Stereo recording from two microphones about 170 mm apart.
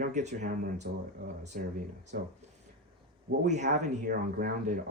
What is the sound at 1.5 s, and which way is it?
Speech, 55° right (ahead or behind).